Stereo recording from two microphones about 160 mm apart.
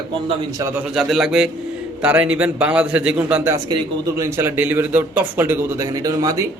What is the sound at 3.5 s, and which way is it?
Speech, 25° right (ahead or behind).